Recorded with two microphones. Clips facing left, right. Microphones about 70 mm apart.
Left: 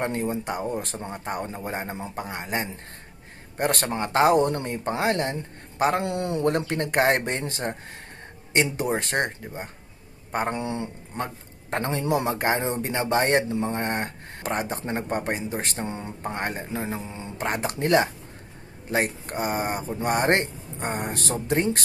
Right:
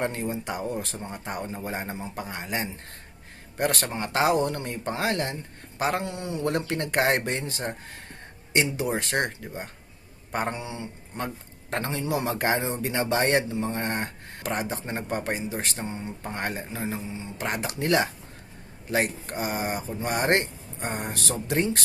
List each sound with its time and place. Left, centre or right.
0.0 s speech: left
6.0 s speech: left
6.4 s speech: left
10.5 s speech: left
11.8 s speech: left
16.2 s speech: left
16.8 s speech: left
17.3 s speech: left